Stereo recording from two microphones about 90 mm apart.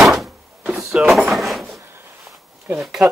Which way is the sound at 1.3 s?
Centre (ahead or behind).